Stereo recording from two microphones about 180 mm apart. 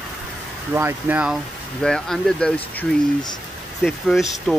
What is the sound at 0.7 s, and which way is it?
Speech, 10° right (ahead or behind).